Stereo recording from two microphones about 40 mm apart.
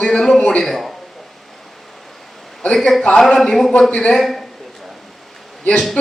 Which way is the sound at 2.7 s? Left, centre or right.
Centre.